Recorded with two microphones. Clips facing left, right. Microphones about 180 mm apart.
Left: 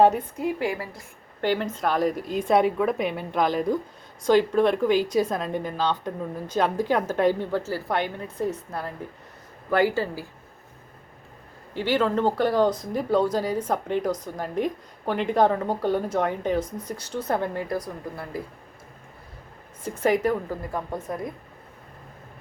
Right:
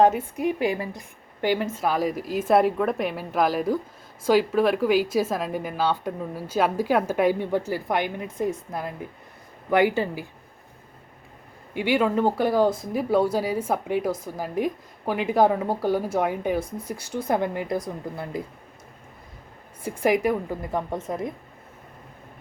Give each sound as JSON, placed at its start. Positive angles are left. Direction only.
{"t": 0.3, "sound": "a woman's voice", "side_deg": -20}
{"t": 11.7, "sound": "speech", "side_deg": -10}
{"t": 19.8, "sound": "speech", "side_deg": -10}